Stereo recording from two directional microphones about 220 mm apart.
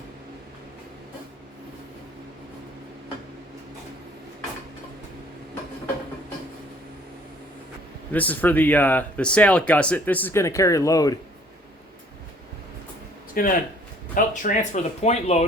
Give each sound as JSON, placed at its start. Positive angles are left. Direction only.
{"t": 8.1, "sound": "speech", "side_deg": 5}
{"t": 13.3, "sound": "speech", "side_deg": 40}